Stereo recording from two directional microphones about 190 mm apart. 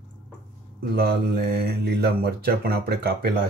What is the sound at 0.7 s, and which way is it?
Speech, 55° right (ahead or behind).